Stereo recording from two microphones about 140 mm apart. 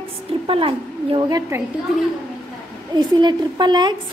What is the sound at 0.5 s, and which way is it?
Speech, 40° right (ahead or behind).